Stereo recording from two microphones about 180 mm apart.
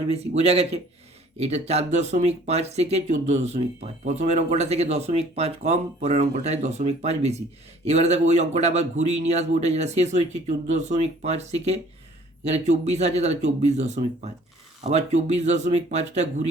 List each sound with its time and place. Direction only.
0.1 s speech: 35° right (ahead or behind)